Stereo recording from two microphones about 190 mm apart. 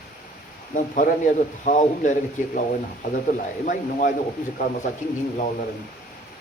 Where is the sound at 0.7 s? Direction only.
45° left (ahead or behind).